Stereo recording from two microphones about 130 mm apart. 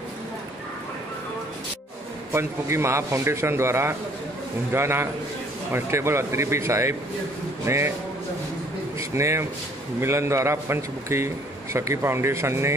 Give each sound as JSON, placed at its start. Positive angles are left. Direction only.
{"t": 2.3, "sound": "a man's voice", "side_deg": -20}
{"t": 9.1, "sound": "a man's voice", "side_deg": -20}